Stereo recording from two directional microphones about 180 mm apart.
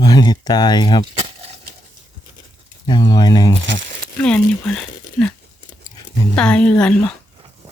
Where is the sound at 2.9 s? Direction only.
20° left (ahead or behind).